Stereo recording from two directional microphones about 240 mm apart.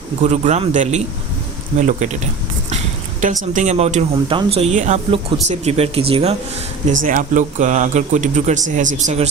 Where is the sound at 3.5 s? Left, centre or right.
Right.